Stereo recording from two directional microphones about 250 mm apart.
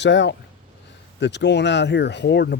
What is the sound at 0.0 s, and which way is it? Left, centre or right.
Speech, left.